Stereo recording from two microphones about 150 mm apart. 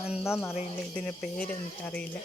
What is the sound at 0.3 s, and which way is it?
Speech, 15° left (ahead or behind).